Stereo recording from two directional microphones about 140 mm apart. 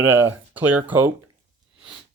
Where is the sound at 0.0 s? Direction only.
20° right (ahead or behind).